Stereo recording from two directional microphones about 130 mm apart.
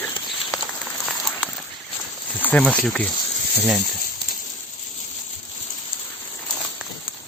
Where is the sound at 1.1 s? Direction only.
Centre (ahead or behind).